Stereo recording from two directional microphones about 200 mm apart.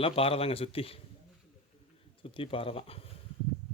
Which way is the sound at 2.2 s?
25° left (ahead or behind).